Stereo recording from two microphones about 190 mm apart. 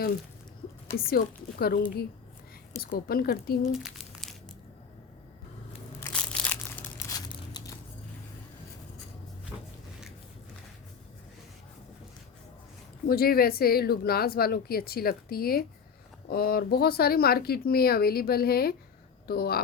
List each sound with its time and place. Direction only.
0.9 s a woman's voice: 55° left (ahead or behind)
3.7 s crumpling: centre (ahead or behind)
6.0 s crushing: 10° left (ahead or behind)
7.1 s crumpling: 20° left (ahead or behind)
13.1 s a woman's voice: 50° left (ahead or behind)